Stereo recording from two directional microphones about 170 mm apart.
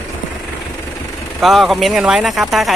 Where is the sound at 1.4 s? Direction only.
Centre (ahead or behind).